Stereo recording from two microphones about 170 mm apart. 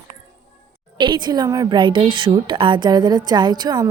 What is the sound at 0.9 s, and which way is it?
A woman's voice, 25° right (ahead or behind).